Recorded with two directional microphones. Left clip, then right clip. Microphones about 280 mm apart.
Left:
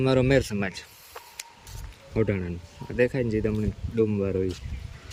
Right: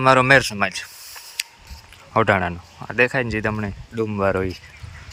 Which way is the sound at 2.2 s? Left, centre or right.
Centre.